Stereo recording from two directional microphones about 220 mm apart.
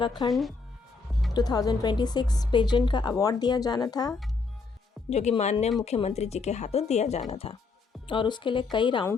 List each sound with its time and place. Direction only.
0.3 s speech: centre (ahead or behind)
1.3 s a woman's voice: 15° left (ahead or behind)
5.0 s a woman's voice: 30° left (ahead or behind)